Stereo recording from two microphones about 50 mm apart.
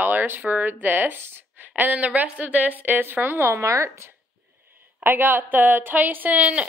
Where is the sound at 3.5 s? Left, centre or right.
Right.